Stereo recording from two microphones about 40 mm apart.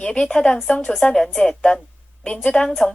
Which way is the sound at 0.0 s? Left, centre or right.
Centre.